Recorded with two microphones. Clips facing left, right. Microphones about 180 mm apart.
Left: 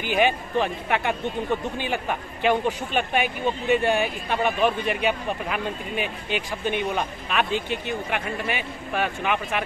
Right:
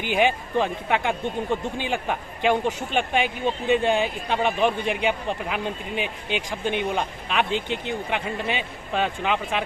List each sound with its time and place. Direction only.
0.0 s a man's voice: 15° right (ahead or behind)